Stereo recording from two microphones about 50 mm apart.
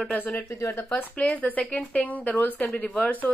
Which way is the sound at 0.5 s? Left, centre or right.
Left.